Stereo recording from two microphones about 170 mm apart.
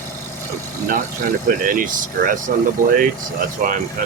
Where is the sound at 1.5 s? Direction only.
55° right (ahead or behind).